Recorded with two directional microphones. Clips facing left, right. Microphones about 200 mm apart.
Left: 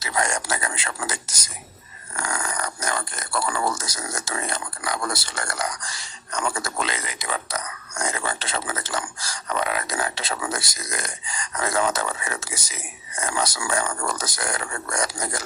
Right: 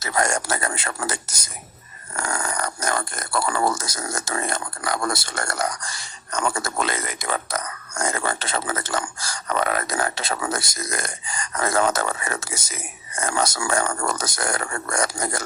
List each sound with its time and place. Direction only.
0.0 s speech: 45° right (ahead or behind)
2.1 s speech: 40° right (ahead or behind)